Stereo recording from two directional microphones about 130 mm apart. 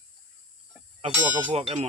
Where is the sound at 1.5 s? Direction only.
55° right (ahead or behind).